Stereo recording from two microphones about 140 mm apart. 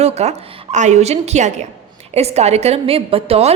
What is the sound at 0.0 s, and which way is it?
A woman's voice, 50° right (ahead or behind).